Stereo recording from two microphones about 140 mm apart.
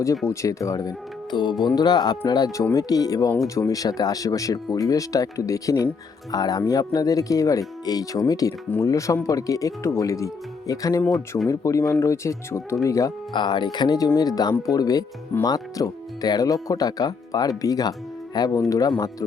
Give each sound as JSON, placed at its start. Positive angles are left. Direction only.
{"t": 0.3, "sound": "speech", "side_deg": 25}
{"t": 13.3, "sound": "speech", "side_deg": 35}